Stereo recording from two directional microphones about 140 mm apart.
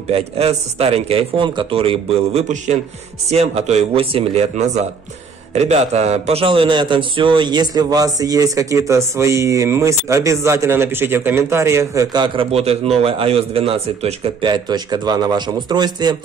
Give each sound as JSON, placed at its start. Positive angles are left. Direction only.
{"t": 0.1, "sound": "a man's voice", "side_deg": -45}
{"t": 12.4, "sound": "a man's voice", "side_deg": -45}